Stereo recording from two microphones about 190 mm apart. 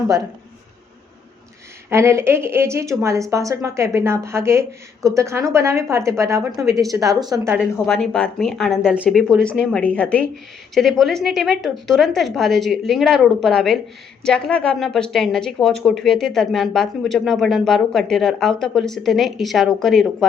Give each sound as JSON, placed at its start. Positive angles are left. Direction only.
{"t": 1.9, "sound": "a woman's voice", "side_deg": -15}
{"t": 7.9, "sound": "speech", "side_deg": 0}